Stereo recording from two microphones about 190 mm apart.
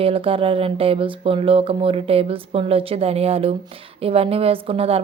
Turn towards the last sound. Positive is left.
turn(degrees=-30)  # may be behind; listen again after turning